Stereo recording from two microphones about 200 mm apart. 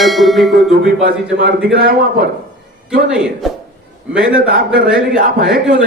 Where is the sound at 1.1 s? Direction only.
50° right (ahead or behind).